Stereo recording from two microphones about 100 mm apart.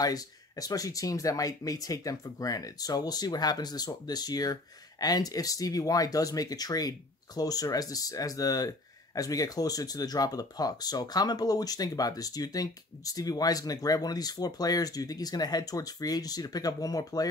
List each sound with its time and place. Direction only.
0.0 s speech: 40° left (ahead or behind)